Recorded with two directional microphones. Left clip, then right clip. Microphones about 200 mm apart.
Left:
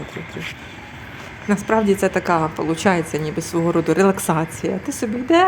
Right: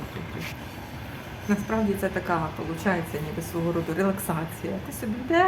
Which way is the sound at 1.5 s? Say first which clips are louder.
Left 9 dB; 45° left (ahead or behind).